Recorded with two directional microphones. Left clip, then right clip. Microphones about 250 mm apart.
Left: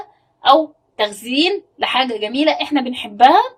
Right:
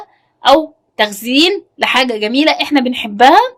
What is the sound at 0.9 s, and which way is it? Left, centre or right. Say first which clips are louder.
A woman's voice: right 5 dB; right.